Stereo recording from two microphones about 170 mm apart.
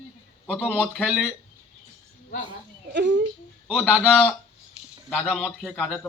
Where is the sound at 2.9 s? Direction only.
90° right.